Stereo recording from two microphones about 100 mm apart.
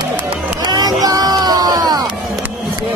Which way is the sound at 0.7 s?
40° right (ahead or behind).